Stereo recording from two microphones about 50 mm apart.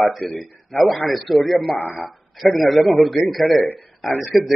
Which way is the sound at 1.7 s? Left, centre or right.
Left.